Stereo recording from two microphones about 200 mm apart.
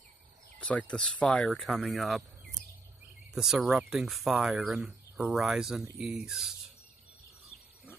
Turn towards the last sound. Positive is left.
turn(degrees=-5)  # may be behind; listen again after turning